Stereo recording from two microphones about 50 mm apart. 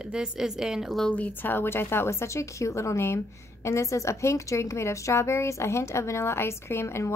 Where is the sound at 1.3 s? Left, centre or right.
Left.